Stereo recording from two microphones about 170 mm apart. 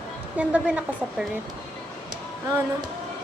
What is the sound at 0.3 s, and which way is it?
Speech, 10° right (ahead or behind).